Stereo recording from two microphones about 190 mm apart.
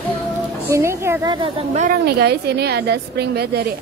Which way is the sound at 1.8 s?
50° right (ahead or behind).